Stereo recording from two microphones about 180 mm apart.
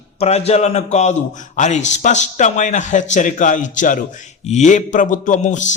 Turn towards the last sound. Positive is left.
turn(degrees=40)  # may be behind; listen again after turning